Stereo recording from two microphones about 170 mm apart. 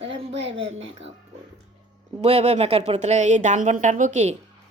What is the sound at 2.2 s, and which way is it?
A woman's voice, 40° right (ahead or behind).